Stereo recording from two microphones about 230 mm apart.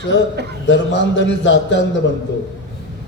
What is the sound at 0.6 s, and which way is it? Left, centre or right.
A man's voice, left.